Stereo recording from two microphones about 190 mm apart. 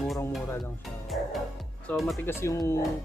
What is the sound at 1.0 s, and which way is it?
Music, centre (ahead or behind).